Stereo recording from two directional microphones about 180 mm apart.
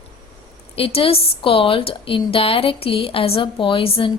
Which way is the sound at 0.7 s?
30° left (ahead or behind).